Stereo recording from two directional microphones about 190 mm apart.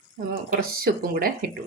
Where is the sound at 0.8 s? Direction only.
50° right (ahead or behind).